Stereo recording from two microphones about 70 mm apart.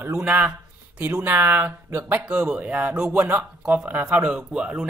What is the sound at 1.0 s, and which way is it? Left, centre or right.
Speech, right.